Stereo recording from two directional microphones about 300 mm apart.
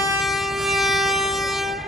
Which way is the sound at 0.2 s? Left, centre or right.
Centre.